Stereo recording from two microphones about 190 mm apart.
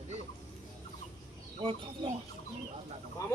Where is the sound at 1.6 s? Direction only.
30° right (ahead or behind).